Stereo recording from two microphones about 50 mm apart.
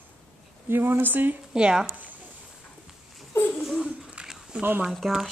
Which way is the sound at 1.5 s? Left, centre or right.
Centre.